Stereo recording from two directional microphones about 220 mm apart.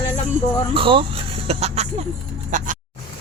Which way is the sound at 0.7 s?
25° right (ahead or behind).